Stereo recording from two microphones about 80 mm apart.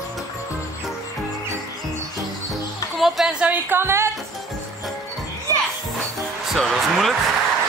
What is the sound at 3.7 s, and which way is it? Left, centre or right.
Speech, right.